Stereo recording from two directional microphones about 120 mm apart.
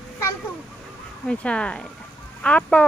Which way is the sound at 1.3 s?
10° left (ahead or behind).